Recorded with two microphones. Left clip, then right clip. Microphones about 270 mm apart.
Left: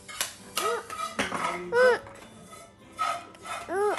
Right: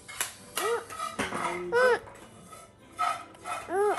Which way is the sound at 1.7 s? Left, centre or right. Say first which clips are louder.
Left 2 dB; centre.